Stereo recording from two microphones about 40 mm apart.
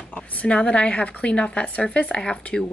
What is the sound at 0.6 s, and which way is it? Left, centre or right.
Speech, left.